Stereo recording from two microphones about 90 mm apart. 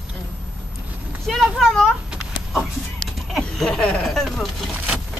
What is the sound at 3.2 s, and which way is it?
Speech, centre (ahead or behind).